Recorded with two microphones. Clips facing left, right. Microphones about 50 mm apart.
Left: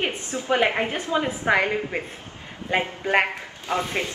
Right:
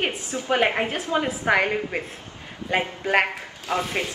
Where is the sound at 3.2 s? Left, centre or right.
Centre.